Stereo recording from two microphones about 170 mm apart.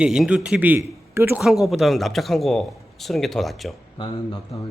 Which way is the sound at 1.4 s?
Centre (ahead or behind).